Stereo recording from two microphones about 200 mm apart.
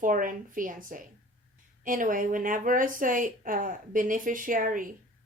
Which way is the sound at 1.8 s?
40° right (ahead or behind).